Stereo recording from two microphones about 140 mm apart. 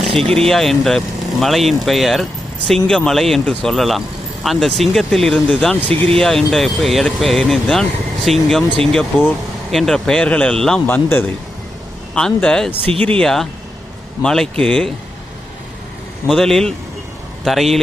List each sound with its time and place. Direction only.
0.2 s speech: 5° left (ahead or behind)
10.8 s speech: 15° left (ahead or behind)
16.2 s speech: 5° left (ahead or behind)